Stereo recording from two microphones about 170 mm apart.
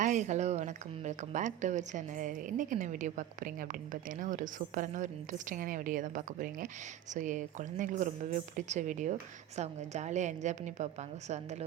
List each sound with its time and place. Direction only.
0.0 s a woman's voice: 45° right (ahead or behind)